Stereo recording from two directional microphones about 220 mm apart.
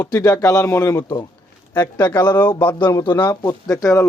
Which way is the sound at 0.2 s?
15° left (ahead or behind).